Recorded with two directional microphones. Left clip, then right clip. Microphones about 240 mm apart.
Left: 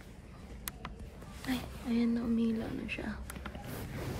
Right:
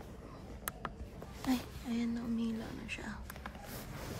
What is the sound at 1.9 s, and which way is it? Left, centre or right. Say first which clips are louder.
A woman's voice: left 6 dB; centre.